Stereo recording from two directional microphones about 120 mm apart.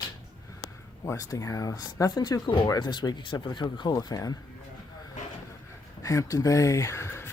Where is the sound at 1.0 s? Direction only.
30° left (ahead or behind).